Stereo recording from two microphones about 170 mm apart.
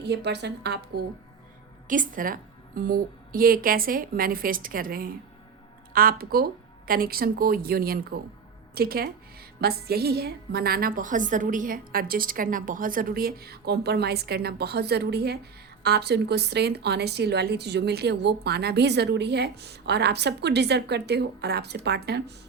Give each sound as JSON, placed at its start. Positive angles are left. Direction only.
{"t": 0.0, "sound": "a woman's voice", "side_deg": -80}
{"t": 1.9, "sound": "a woman's voice", "side_deg": -50}